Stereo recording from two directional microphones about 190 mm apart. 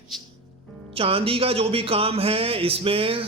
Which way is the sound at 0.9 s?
30° right (ahead or behind).